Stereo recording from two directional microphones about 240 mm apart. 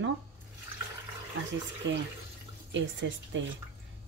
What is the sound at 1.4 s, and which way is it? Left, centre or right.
Speech, right.